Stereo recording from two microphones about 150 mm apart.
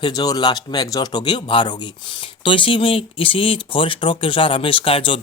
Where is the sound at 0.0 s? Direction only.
25° left (ahead or behind).